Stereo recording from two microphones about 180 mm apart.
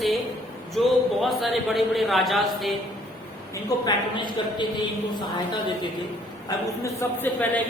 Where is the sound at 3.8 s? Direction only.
25° left (ahead or behind).